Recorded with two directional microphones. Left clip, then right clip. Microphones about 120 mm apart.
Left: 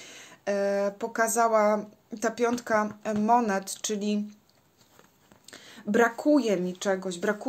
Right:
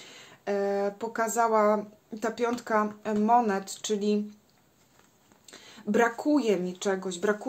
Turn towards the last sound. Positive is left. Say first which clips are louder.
# right 1 dB
turn(degrees=50)  # may be behind; listen again after turning